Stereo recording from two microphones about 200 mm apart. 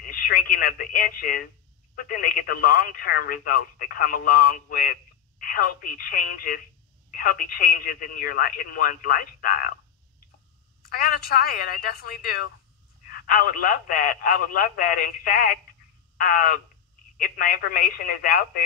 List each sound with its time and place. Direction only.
0.1 s speech: 45° left (ahead or behind)
10.9 s speech: 50° left (ahead or behind)